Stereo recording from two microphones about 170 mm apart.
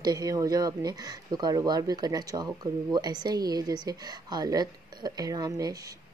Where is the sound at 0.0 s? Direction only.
20° right (ahead or behind).